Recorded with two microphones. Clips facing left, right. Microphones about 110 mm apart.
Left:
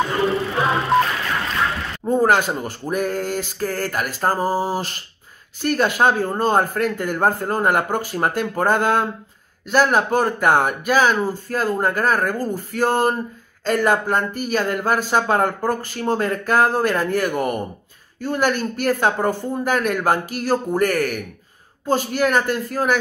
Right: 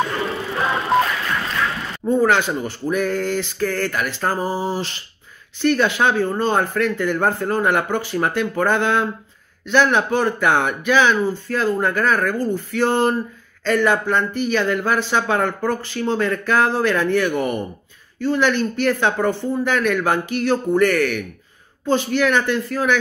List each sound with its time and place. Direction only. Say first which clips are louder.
0.2 s music: left 3 dB; centre (ahead or behind)
2.2 s speech: even; 45° left (ahead or behind)